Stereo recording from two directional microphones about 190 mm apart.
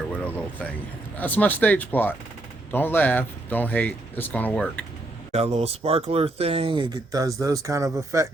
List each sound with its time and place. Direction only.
1.2 s speech: 10° left (ahead or behind)
5.3 s speech: 30° right (ahead or behind); by 8.3 s 15° right (ahead or behind)